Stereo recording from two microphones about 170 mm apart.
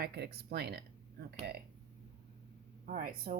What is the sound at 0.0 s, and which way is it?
Speech, 70° right (ahead or behind).